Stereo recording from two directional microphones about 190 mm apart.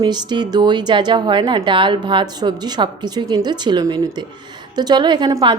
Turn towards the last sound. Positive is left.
turn(degrees=-20)  # may be behind; listen again after turning